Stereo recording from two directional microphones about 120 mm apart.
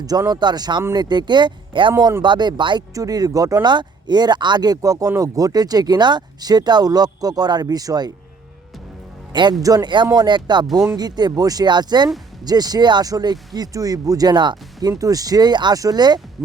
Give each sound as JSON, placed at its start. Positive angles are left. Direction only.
{"t": 0.0, "sound": "speech", "side_deg": -30}
{"t": 9.3, "sound": "speech", "side_deg": -40}